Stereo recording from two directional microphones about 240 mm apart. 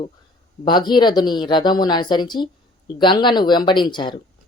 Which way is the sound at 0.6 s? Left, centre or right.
Centre.